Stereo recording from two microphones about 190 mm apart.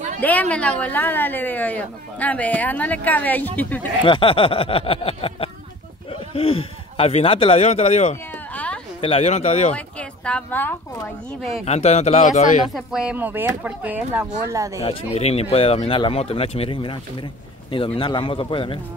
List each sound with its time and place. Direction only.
0.2 s speech: 10° left (ahead or behind)
4.0 s speech: 25° left (ahead or behind)
8.3 s a sound: 10° left (ahead or behind)
9.0 s speech: 30° left (ahead or behind)
9.8 s speech: 5° left (ahead or behind)
11.6 s speech: 35° left (ahead or behind)
12.7 s speech: 5° right (ahead or behind)
14.8 s speech: 30° left (ahead or behind)